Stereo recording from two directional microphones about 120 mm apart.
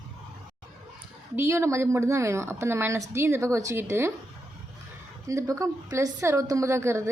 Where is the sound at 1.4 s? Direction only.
25° right (ahead or behind).